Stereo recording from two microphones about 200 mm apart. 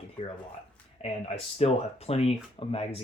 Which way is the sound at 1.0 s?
30° left (ahead or behind).